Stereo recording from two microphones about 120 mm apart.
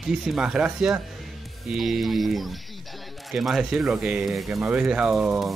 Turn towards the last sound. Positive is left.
turn(degrees=-5)  # may be behind; listen again after turning